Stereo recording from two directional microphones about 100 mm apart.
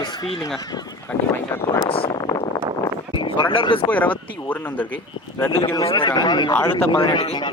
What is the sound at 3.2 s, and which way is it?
Speech, 55° left (ahead or behind).